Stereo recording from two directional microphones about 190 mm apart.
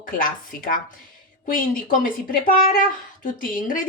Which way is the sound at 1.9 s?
45° left (ahead or behind).